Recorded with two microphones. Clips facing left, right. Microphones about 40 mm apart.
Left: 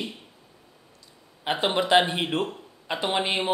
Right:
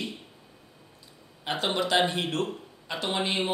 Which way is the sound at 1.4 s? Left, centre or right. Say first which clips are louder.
Left 4 dB; left.